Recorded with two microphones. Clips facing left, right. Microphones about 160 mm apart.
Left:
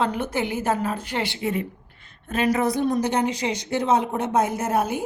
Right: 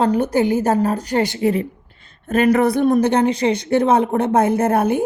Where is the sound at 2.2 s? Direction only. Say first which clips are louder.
Right 7 dB; 50° right (ahead or behind).